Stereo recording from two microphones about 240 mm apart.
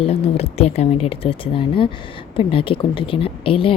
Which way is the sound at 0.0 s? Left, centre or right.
Left.